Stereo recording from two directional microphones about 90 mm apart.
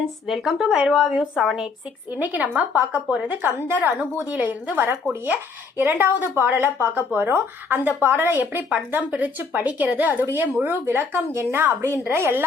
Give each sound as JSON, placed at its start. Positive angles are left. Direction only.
{"t": 0.3, "sound": "speech", "side_deg": 0}
{"t": 2.1, "sound": "a woman's voice", "side_deg": -15}